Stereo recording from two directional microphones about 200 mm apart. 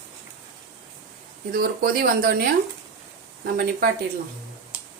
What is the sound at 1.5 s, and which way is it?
Speech, 50° right (ahead or behind).